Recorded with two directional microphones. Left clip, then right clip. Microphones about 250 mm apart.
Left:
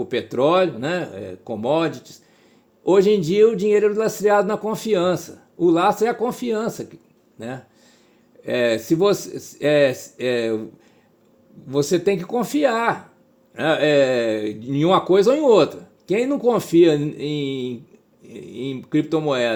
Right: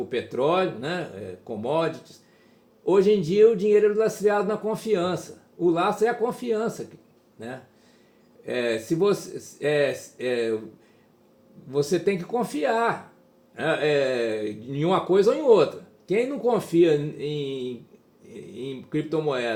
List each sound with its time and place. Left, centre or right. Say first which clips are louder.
0.1 s speech: left 6 dB; left
11.7 s speech: left 4 dB; left